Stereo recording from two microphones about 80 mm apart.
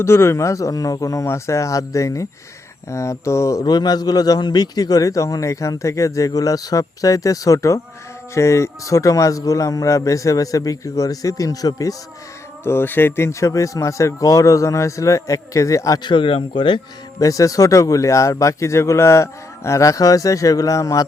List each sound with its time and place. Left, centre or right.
0.0 s speech: left
3.6 s a man's voice: left
12.6 s speech: left
16.0 s speech: left
17.2 s a man's voice: left